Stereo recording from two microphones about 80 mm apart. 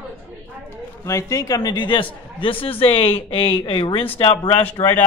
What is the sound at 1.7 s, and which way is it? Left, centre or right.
Speech, left.